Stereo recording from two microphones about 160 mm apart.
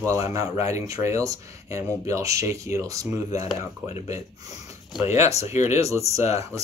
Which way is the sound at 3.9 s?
40° left (ahead or behind).